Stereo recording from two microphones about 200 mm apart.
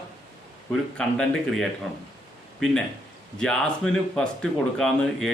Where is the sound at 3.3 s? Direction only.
5° left (ahead or behind).